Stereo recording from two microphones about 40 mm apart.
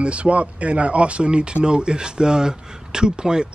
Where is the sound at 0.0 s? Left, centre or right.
Right.